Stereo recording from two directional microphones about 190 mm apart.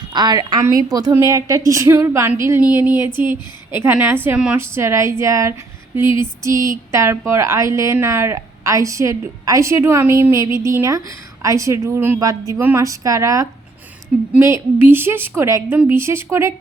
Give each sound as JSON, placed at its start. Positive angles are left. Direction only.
{"t": 0.1, "sound": "a woman's voice", "side_deg": -20}